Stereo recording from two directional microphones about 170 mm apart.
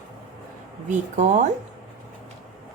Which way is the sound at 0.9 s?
45° right (ahead or behind).